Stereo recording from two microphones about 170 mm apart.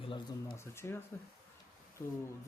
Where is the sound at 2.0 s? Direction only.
20° left (ahead or behind).